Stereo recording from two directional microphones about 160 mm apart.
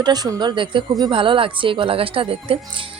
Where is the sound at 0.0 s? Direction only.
25° right (ahead or behind).